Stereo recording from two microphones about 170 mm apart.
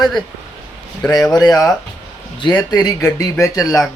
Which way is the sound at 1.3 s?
20° left (ahead or behind).